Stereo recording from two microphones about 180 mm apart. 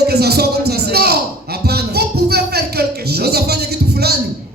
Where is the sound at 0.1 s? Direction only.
60° right (ahead or behind).